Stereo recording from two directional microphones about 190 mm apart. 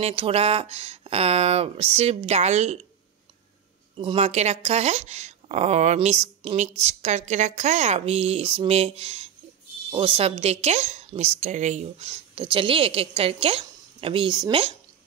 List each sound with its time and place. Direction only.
0.0 s speech: 30° right (ahead or behind)
3.9 s speech: 30° right (ahead or behind)